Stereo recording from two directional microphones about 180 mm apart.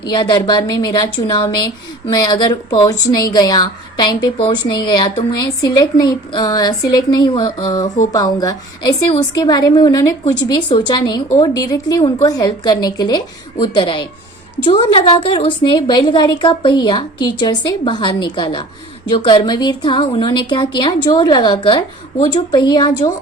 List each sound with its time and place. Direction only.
0.0 s a woman's voice: 25° left (ahead or behind)